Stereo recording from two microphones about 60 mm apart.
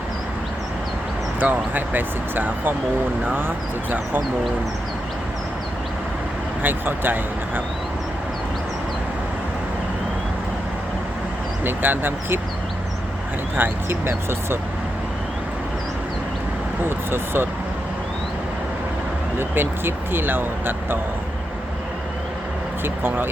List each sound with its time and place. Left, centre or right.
1.4 s speech: right
6.6 s speech: right
11.6 s speech: right
13.6 s speech: right
17.1 s speech: right
19.4 s speech: right
22.8 s speech: right